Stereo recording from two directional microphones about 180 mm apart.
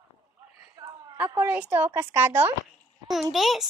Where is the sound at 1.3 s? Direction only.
10° right (ahead or behind).